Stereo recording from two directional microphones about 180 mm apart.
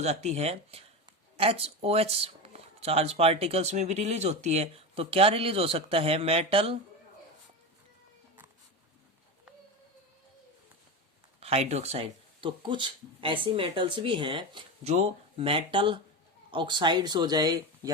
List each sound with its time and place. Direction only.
0.0 s speech: 40° right (ahead or behind)
11.3 s speech: 35° right (ahead or behind)